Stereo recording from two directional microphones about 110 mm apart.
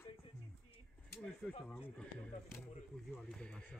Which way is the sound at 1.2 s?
10° left (ahead or behind).